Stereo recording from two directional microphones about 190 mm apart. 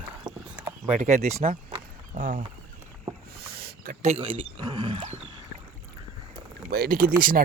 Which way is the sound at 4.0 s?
35° right (ahead or behind).